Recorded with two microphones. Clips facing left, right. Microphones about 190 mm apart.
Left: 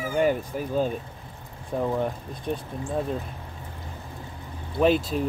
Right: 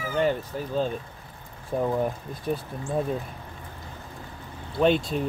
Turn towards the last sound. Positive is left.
turn(degrees=0)  # may be behind; listen again after turning